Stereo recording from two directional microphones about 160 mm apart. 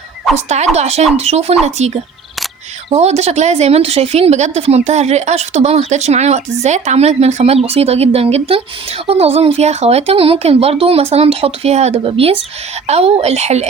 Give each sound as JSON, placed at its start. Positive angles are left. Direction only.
{"t": 0.3, "sound": "speech", "side_deg": -45}